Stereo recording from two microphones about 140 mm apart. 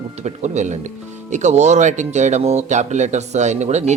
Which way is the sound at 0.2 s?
55° right (ahead or behind).